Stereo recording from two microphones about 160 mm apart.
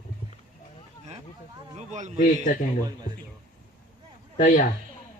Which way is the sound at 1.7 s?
50° right (ahead or behind).